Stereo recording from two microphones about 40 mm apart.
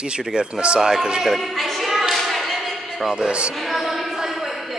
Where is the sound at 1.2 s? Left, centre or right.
Centre.